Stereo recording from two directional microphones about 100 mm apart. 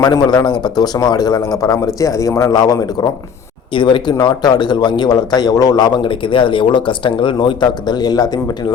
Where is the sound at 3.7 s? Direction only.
55° left (ahead or behind).